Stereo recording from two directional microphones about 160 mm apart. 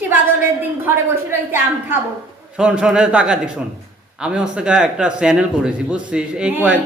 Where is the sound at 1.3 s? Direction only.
15° right (ahead or behind).